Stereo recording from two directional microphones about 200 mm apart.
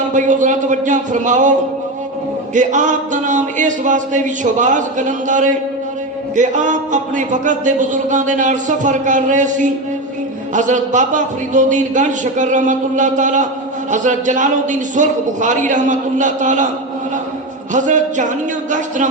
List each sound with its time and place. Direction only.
0.1 s a man's voice: 40° right (ahead or behind)
2.6 s a man's voice: 40° right (ahead or behind)
17.7 s a man's voice: 40° right (ahead or behind)